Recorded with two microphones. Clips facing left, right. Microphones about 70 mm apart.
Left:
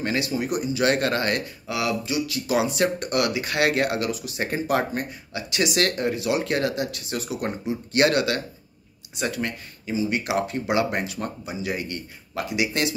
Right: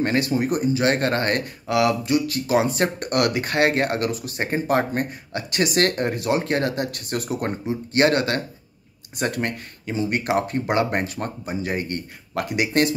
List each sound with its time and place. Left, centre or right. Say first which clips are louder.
0.0 s speech: right 4 dB; right
2.4 s speech: right 2 dB; right
9.1 s speech: right 3 dB; right